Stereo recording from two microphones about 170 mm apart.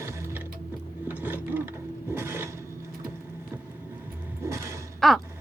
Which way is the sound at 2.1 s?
15° right (ahead or behind).